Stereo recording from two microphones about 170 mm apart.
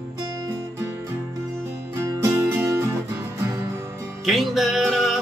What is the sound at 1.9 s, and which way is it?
Music, 15° right (ahead or behind).